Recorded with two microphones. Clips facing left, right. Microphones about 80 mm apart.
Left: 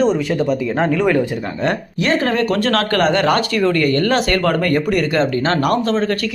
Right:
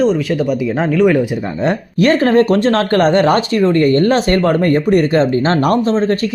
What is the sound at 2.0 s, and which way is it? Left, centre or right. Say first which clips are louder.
Speech: right 6 dB; right.